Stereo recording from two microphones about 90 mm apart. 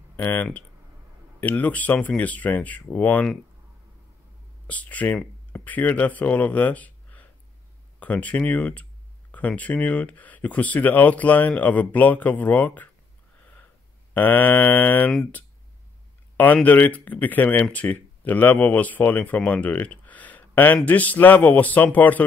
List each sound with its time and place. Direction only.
0.1 s speech: 20° left (ahead or behind)
4.6 s speech: 15° left (ahead or behind)
14.1 s speech: 20° left (ahead or behind)
16.6 s speech: 20° left (ahead or behind)